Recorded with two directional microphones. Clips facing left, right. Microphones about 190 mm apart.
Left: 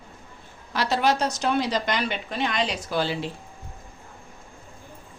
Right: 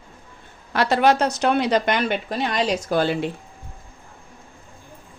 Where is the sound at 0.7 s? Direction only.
55° right (ahead or behind).